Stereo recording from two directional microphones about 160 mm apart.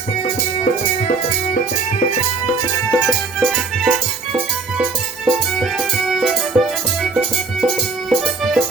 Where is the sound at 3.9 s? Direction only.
10° right (ahead or behind).